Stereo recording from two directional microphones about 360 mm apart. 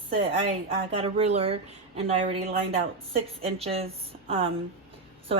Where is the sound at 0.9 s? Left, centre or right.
Centre.